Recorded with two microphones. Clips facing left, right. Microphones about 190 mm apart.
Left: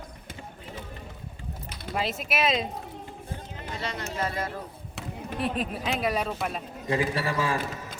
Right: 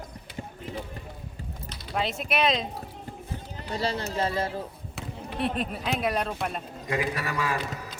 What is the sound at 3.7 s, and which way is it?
Speech, 35° right (ahead or behind).